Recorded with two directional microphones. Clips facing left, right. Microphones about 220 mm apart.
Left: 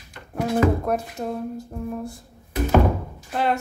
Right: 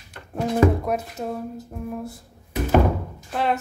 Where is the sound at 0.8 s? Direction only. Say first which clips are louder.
Left 1 dB; centre (ahead or behind).